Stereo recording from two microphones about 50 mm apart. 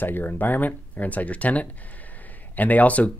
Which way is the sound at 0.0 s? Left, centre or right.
Left.